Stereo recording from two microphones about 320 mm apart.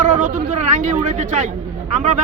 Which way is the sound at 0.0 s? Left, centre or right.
Right.